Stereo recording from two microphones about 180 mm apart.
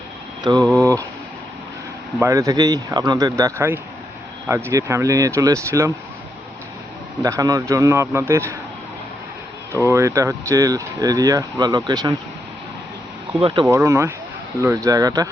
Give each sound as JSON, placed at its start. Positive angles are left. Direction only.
{"t": 0.4, "sound": "speech", "side_deg": -20}
{"t": 2.1, "sound": "speech", "side_deg": -15}
{"t": 7.2, "sound": "speech", "side_deg": -20}
{"t": 9.8, "sound": "speech", "side_deg": -15}
{"t": 13.4, "sound": "speech", "side_deg": -30}
{"t": 13.7, "sound": "speech", "side_deg": -15}